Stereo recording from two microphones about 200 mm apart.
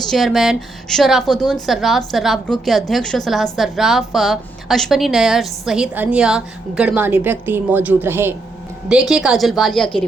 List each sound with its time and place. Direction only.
0.1 s a woman's voice: centre (ahead or behind)